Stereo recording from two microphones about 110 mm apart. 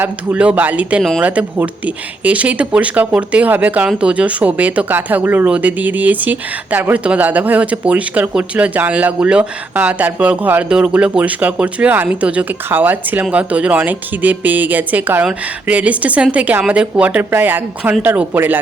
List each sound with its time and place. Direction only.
0.0 s speech: 15° right (ahead or behind)